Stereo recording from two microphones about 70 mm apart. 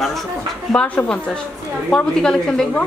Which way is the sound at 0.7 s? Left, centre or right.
Centre.